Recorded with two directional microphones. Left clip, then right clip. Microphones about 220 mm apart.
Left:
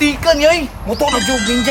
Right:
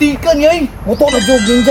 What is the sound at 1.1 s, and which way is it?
Speech, centre (ahead or behind).